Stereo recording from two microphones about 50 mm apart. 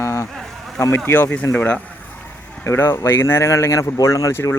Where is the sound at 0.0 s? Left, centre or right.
Left.